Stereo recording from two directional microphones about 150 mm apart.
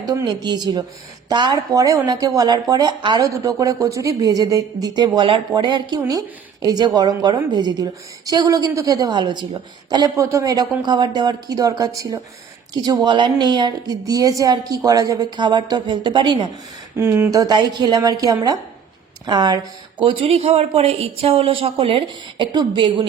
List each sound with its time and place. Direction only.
0.0 s speech: 25° right (ahead or behind)
17.0 s speech: 15° right (ahead or behind)
17.4 s speech: 30° right (ahead or behind)